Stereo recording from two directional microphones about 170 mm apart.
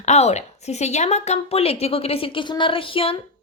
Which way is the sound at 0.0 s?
40° left (ahead or behind).